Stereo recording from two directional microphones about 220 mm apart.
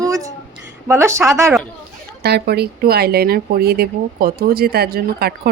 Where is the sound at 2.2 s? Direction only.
45° right (ahead or behind).